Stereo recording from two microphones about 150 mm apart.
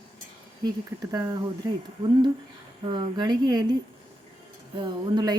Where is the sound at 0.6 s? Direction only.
25° right (ahead or behind).